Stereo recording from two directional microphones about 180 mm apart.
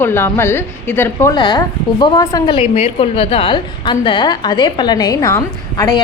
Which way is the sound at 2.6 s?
30° left (ahead or behind).